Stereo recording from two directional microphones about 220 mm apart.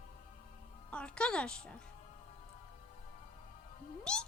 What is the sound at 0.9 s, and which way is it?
Speech, 5° left (ahead or behind).